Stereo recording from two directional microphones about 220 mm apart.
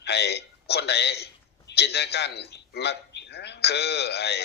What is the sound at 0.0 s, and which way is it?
A man's voice, 50° left (ahead or behind).